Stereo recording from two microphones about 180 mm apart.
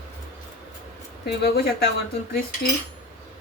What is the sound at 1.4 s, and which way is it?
Speech, 60° left (ahead or behind).